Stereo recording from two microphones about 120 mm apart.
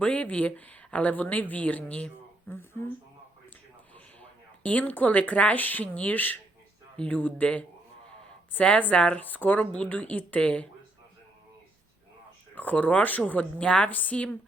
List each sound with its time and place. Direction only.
0.0 s a woman's voice: 10° left (ahead or behind)
3.9 s a woman's voice: 10° left (ahead or behind)
12.5 s a woman's voice: 15° left (ahead or behind)